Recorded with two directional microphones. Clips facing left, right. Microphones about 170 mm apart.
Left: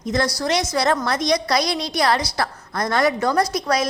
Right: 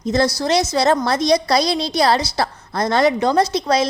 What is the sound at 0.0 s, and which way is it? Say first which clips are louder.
A woman's voice: right 4 dB; 25° right (ahead or behind).